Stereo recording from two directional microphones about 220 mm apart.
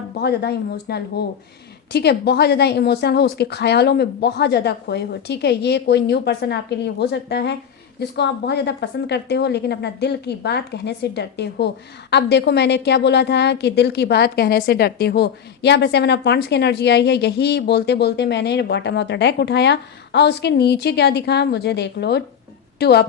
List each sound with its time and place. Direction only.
0.2 s a woman's voice: 45° left (ahead or behind)